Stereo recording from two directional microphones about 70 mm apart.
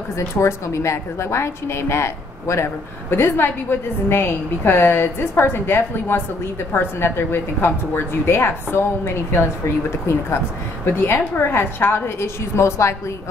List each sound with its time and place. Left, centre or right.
0.4 s a woman's voice: left